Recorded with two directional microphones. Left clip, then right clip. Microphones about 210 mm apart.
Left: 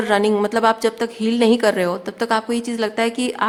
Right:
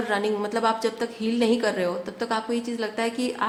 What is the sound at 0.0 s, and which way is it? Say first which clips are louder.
A woman's voice: left 8 dB; 35° left (ahead or behind).